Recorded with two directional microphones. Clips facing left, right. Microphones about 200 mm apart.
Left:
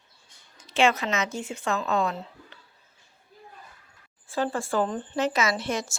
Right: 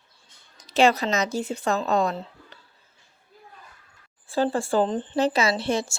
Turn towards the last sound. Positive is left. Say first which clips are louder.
# right 3 dB
turn(degrees=-30)  # may be behind; listen again after turning